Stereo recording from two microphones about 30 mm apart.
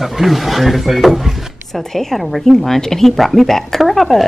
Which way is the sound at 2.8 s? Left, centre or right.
Centre.